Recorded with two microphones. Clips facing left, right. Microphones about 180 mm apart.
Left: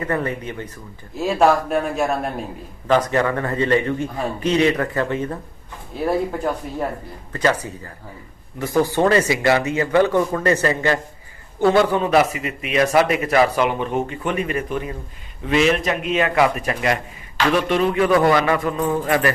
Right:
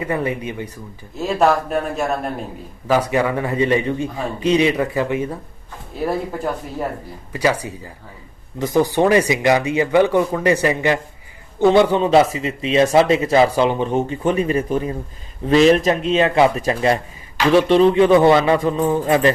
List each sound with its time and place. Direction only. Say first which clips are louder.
0.0 s speech: right 1 dB; 10° right (ahead or behind)
1.1 s speech: even; centre (ahead or behind)
7.3 s speech: right 1 dB; 10° right (ahead or behind)